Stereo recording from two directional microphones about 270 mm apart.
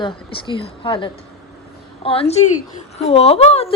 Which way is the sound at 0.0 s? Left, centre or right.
Centre.